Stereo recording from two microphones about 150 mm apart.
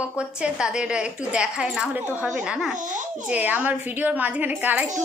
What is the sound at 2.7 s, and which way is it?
Speech, 55° right (ahead or behind).